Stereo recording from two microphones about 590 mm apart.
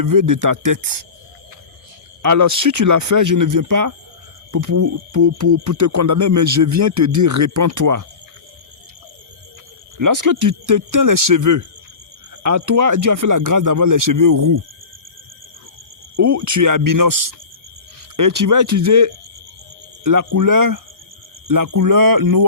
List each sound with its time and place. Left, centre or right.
0.0 s speech: right
2.2 s speech: right
10.0 s speech: right
16.1 s speech: right